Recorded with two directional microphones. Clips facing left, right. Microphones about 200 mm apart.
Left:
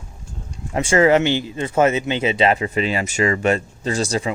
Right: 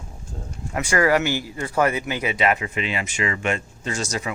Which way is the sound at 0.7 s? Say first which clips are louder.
Left 5 dB; 25° left (ahead or behind).